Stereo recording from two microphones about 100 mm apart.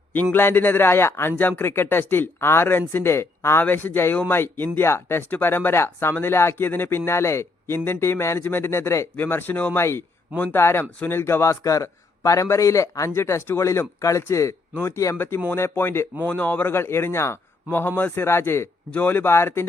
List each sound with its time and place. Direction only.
0.1 s a man's voice: 15° left (ahead or behind)